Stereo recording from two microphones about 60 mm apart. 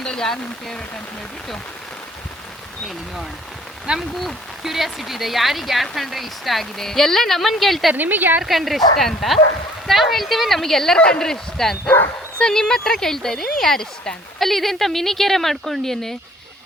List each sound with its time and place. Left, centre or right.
0.0 s speech: centre
4.1 s speech: centre
7.9 s a woman's voice: right
8.4 s speech: centre